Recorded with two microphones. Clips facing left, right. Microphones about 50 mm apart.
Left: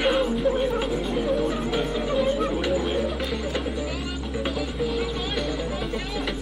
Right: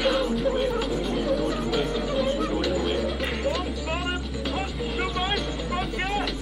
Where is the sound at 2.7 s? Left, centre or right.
Centre.